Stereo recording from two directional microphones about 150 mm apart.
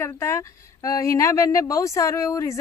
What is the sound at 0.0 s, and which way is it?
A woman's voice, 20° left (ahead or behind).